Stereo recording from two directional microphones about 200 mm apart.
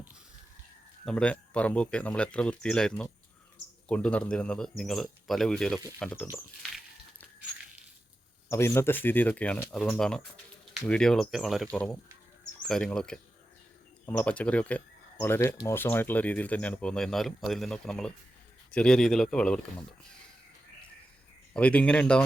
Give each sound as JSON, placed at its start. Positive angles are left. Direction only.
{"t": 1.0, "sound": "speech", "side_deg": 5}
{"t": 6.3, "sound": "a sound", "side_deg": 0}
{"t": 8.4, "sound": "speech", "side_deg": 15}
{"t": 21.5, "sound": "speech", "side_deg": 5}